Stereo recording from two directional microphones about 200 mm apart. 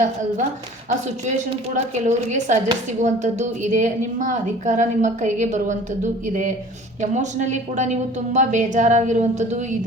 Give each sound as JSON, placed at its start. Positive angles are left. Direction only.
{"t": 1.0, "sound": "a woman's voice", "side_deg": -35}